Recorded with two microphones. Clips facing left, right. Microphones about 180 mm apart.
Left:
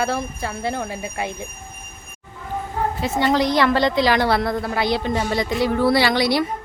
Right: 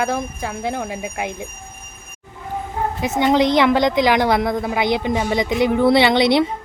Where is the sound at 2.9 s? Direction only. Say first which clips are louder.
Right 4 dB; 15° right (ahead or behind).